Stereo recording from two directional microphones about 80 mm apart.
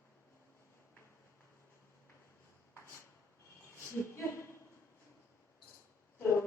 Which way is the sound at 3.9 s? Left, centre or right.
Left.